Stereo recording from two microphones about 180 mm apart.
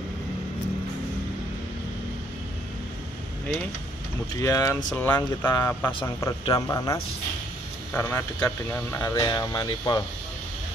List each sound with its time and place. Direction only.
4.4 s speech: 15° left (ahead or behind)
4.9 s speech: 10° left (ahead or behind)
5.9 s speech: 25° left (ahead or behind)